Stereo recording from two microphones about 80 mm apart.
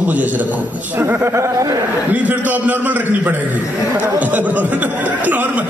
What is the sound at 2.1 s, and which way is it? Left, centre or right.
A man's voice, right.